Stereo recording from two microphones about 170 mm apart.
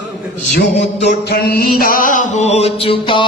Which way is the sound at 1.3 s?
65° left (ahead or behind).